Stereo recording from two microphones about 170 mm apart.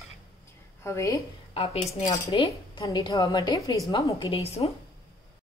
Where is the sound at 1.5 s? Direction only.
35° left (ahead or behind).